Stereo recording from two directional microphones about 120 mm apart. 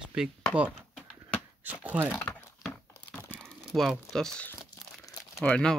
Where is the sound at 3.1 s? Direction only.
15° left (ahead or behind).